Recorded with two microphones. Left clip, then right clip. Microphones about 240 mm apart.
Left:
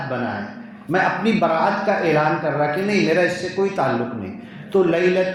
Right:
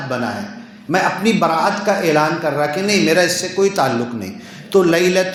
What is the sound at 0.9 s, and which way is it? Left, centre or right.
Mantra, right.